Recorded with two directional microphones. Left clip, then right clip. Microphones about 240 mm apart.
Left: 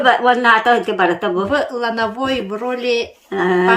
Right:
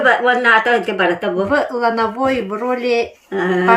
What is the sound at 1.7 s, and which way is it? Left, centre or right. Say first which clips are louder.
Speech: right 3 dB; centre.